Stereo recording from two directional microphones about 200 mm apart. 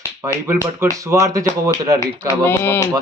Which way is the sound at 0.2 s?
15° right (ahead or behind).